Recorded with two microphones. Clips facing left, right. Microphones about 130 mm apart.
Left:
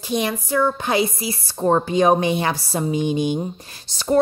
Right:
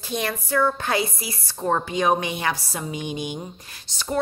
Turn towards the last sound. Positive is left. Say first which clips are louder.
# left 8 dB
turn(degrees=40)  # may be behind; listen again after turning